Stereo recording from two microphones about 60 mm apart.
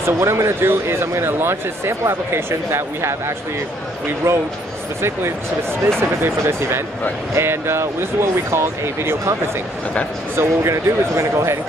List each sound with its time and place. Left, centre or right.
0.0 s speech: right
4.2 s speech: right
5.9 s speech: right
10.3 s speech: right